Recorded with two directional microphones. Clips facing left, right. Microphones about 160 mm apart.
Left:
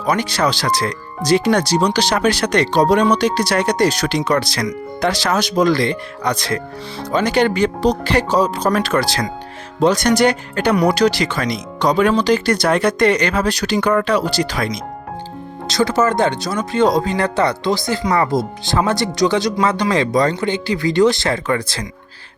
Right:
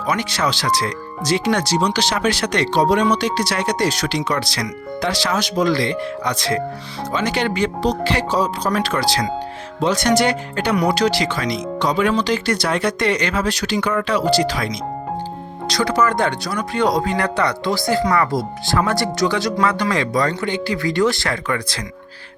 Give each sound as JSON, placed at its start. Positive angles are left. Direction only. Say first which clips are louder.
{"t": 0.0, "sound": "speech", "louder": "left 3 dB", "side_deg": 40}
{"t": 15.7, "sound": "speech", "louder": "left 2 dB", "side_deg": 25}